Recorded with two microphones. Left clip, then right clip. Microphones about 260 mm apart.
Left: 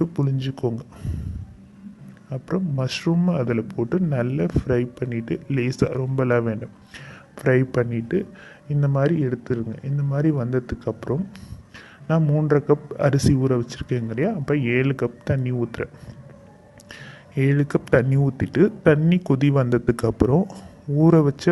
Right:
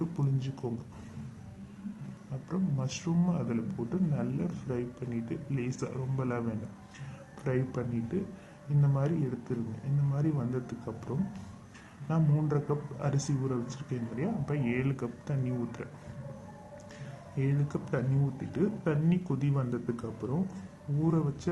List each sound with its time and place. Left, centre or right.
0.0 s a man's voice: left
2.3 s a man's voice: left
16.9 s a sound: left
18.5 s speech: left